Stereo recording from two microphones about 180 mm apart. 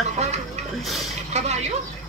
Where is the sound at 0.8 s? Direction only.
Centre (ahead or behind).